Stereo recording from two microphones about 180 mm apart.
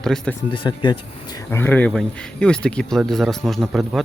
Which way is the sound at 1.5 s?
10° left (ahead or behind).